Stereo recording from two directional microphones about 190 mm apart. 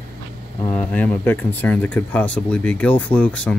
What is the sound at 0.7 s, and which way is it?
Speech, 10° left (ahead or behind).